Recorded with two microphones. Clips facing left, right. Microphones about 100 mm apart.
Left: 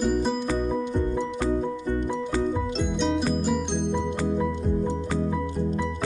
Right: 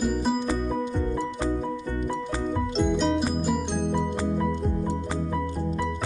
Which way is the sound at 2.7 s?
Centre (ahead or behind).